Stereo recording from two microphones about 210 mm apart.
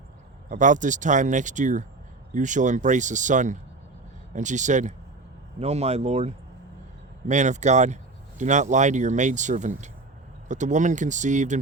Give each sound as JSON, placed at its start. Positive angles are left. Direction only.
{"t": 0.5, "sound": "speech", "side_deg": -35}